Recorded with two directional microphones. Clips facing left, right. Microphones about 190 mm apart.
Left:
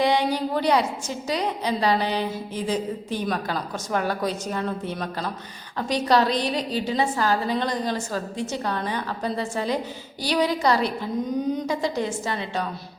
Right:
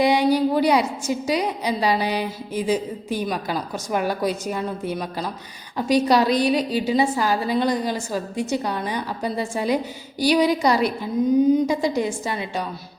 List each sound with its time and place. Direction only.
0.0 s a woman's voice: 10° right (ahead or behind)